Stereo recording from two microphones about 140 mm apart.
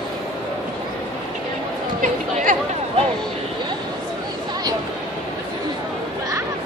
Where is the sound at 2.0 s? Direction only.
70° right (ahead or behind).